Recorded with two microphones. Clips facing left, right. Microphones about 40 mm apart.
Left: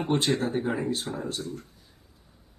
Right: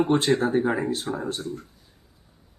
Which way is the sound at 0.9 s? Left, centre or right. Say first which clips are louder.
Right 3 dB; right.